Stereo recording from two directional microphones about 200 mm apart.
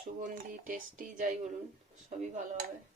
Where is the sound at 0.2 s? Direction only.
45° right (ahead or behind).